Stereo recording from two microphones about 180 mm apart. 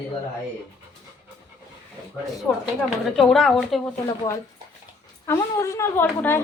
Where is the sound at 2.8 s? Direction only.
Centre (ahead or behind).